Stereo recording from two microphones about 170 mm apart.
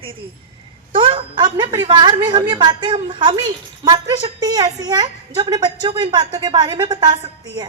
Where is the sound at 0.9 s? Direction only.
30° right (ahead or behind).